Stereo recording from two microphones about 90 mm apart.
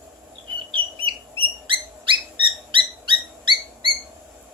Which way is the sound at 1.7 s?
70° right (ahead or behind).